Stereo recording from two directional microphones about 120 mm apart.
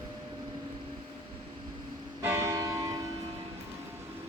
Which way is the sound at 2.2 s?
25° right (ahead or behind).